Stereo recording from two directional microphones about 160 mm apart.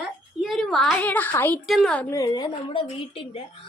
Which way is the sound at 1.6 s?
Centre (ahead or behind).